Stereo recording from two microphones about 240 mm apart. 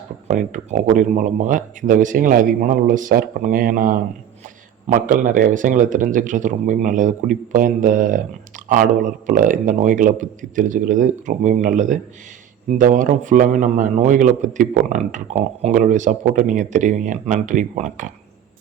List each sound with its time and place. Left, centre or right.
0.3 s a man's voice: right